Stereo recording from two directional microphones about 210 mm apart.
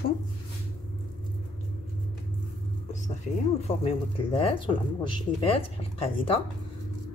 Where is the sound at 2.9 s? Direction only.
35° left (ahead or behind).